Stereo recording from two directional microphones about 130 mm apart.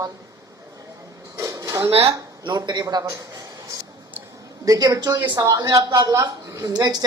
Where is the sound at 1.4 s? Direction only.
25° right (ahead or behind).